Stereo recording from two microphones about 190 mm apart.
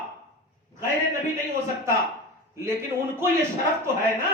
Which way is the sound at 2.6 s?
15° right (ahead or behind).